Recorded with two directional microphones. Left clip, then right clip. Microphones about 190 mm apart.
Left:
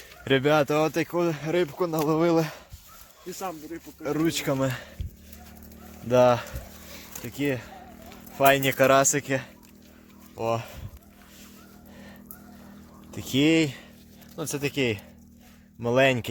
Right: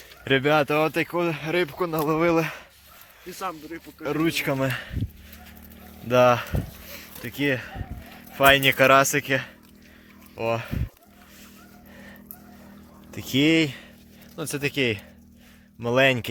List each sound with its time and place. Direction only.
0.3 s speech: 15° left (ahead or behind)
1.6 s speech: 5° left (ahead or behind)
3.3 s speech: 30° left (ahead or behind)
4.0 s speech: 5° left (ahead or behind)
6.1 s speech: 5° left (ahead or behind)
6.9 s a sound: centre (ahead or behind)
8.4 s speech: 5° left (ahead or behind)
13.1 s speech: centre (ahead or behind)